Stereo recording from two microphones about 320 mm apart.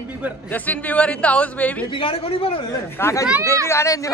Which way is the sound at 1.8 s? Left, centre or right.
Centre.